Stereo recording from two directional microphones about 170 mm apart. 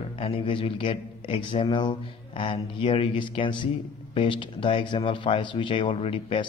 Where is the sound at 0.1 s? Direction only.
30° left (ahead or behind).